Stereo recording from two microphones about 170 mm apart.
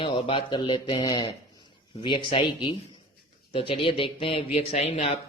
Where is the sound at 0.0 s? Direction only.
30° left (ahead or behind).